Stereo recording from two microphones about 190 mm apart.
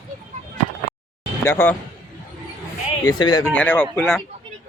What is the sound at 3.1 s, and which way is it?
Speech, 20° left (ahead or behind).